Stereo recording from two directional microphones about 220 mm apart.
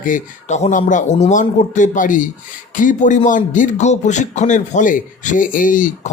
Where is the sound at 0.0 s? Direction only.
35° left (ahead or behind).